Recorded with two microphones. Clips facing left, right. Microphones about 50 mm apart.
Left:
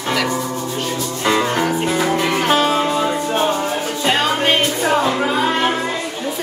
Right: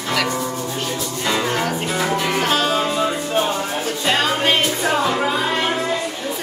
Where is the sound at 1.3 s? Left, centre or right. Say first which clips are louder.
Left 4 dB; centre.